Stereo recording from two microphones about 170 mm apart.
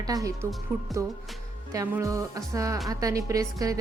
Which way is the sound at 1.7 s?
20° right (ahead or behind).